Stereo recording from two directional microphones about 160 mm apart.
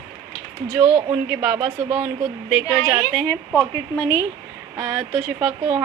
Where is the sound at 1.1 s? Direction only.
15° right (ahead or behind).